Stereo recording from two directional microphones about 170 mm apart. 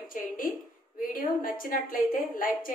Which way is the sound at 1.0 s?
55° left (ahead or behind).